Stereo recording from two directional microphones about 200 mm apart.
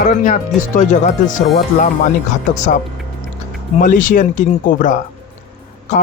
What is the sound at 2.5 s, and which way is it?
Speech, 40° left (ahead or behind).